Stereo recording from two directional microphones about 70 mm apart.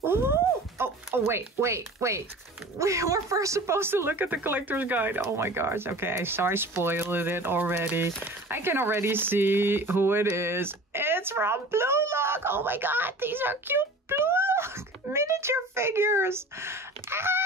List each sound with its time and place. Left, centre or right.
0.0 s speech: right